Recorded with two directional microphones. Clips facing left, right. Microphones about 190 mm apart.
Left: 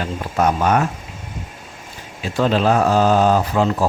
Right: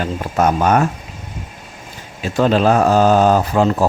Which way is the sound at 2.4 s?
45° right (ahead or behind).